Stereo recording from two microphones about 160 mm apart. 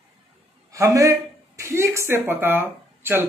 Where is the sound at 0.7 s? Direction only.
20° right (ahead or behind).